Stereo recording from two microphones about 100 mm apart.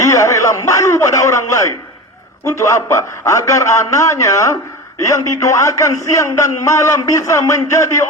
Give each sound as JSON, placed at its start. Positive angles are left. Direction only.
{"t": 0.0, "sound": "a man's voice", "side_deg": 30}